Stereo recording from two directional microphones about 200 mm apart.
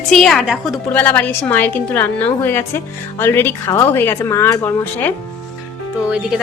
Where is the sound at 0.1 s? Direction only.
Centre (ahead or behind).